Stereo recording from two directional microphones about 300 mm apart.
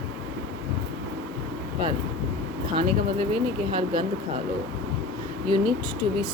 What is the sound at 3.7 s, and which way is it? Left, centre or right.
Speech, centre.